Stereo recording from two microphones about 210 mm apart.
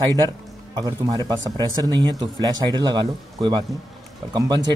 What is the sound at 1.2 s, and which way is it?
A man's voice, 20° right (ahead or behind).